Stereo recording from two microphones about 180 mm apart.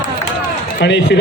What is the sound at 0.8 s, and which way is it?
Speech, 75° left (ahead or behind).